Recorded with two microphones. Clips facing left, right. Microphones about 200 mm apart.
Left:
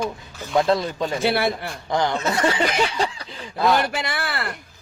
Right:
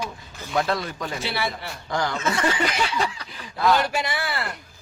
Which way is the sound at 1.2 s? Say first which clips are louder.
Left 8 dB; 55° left (ahead or behind).